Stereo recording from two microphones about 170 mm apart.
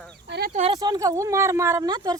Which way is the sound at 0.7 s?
25° right (ahead or behind).